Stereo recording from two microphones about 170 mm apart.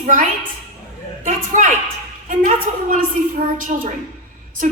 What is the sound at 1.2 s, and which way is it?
A woman's voice, 50° right (ahead or behind).